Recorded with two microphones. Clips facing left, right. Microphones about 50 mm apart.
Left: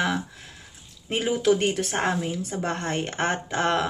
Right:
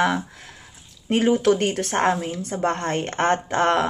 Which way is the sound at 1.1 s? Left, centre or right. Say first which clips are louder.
Right 4 dB; right.